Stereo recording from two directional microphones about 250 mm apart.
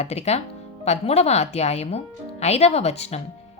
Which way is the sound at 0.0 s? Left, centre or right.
Left.